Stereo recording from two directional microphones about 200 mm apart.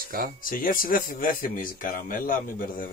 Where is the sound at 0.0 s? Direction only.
45° right (ahead or behind).